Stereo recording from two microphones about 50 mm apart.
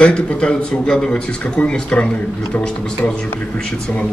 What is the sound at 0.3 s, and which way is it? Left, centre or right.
Speech, left.